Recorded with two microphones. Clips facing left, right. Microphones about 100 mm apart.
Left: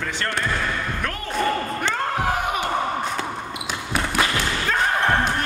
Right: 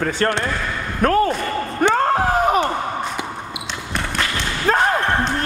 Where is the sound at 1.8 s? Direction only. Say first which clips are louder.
Right 13 dB; 40° right (ahead or behind).